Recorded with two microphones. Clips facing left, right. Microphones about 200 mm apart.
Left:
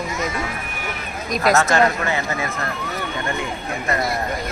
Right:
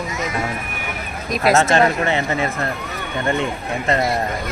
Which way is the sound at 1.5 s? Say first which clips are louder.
Right 2 dB; 25° right (ahead or behind).